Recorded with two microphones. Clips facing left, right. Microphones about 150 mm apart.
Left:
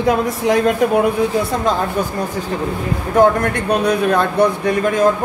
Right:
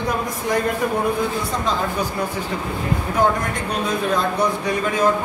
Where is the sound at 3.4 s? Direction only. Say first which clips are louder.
Left 7 dB; 65° left (ahead or behind).